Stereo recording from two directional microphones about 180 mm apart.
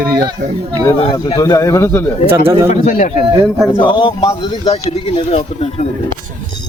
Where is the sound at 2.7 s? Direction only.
45° left (ahead or behind).